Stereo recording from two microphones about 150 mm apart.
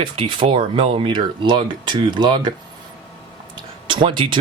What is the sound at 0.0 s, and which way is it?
Speech, 35° right (ahead or behind).